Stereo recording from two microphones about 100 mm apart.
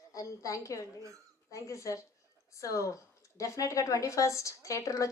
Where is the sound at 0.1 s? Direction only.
35° left (ahead or behind).